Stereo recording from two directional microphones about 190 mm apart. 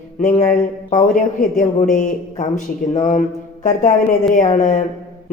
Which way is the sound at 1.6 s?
45° left (ahead or behind).